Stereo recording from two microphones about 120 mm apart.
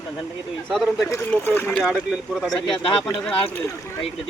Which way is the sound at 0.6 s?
Centre (ahead or behind).